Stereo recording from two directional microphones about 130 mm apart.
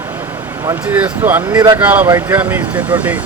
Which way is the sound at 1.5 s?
30° right (ahead or behind).